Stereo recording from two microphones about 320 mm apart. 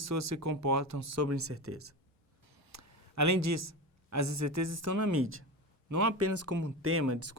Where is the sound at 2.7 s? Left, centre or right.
Right.